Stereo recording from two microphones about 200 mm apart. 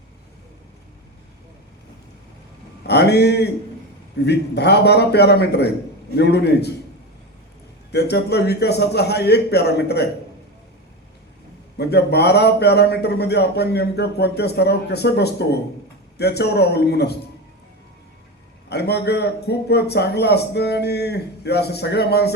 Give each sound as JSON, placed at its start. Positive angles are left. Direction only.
{"t": 2.8, "sound": "a man's voice", "side_deg": 55}
{"t": 7.9, "sound": "a man's voice", "side_deg": 55}
{"t": 11.8, "sound": "a man's voice", "side_deg": 55}
{"t": 18.7, "sound": "a man's voice", "side_deg": 55}